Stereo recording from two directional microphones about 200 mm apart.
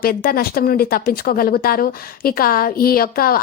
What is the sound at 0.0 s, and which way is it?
Speech, 50° left (ahead or behind).